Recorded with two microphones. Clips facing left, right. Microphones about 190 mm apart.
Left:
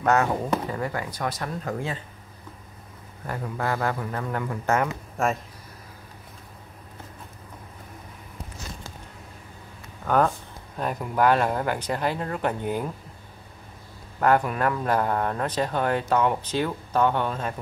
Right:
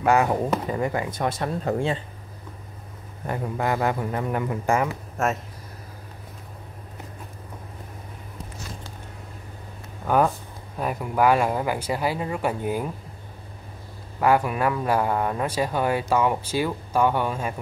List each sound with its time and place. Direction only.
0.0 s speech: 10° right (ahead or behind); by 2.0 s 30° right (ahead or behind)
3.3 s speech: 20° right (ahead or behind); by 5.4 s centre (ahead or behind)
10.0 s speech: 10° right (ahead or behind)
14.2 s speech: 10° right (ahead or behind)